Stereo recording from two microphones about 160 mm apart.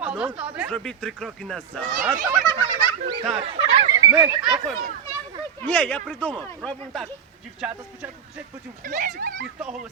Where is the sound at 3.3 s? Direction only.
35° right (ahead or behind).